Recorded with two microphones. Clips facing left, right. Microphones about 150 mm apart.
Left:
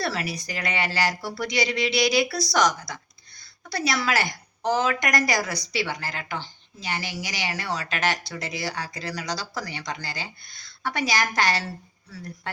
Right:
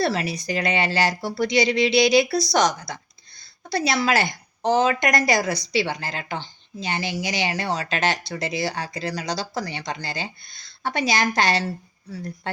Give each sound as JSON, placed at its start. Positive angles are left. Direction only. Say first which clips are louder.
{"t": 0.0, "sound": "a woman's voice", "louder": "right 5 dB", "side_deg": -25}